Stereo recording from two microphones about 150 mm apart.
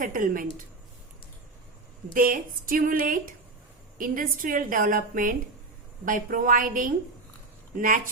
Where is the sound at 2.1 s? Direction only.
65° right (ahead or behind).